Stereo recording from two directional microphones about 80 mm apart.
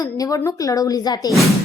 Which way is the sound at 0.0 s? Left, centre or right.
Left.